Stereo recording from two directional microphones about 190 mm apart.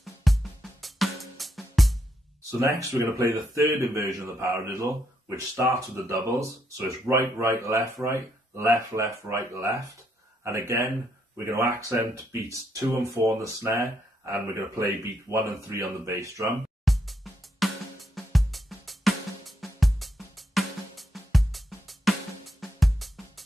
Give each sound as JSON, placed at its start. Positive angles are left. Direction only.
{"t": 0.0, "sound": "music", "side_deg": 0}
{"t": 2.6, "sound": "speech", "side_deg": -15}
{"t": 16.8, "sound": "drum kit", "side_deg": 0}
{"t": 18.1, "sound": "music", "side_deg": 0}